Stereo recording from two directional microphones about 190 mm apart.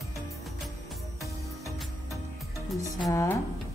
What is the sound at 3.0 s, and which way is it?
Speech, 15° left (ahead or behind).